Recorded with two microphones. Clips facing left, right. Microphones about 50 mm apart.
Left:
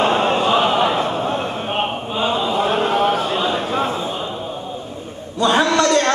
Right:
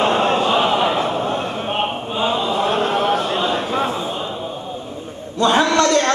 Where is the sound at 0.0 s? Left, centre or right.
Centre.